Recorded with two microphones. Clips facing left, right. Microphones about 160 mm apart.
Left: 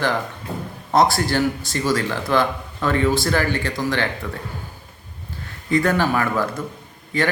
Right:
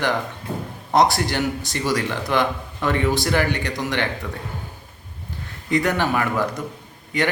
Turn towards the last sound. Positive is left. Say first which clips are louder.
# left 1 dB
turn(degrees=-20)  # may be behind; listen again after turning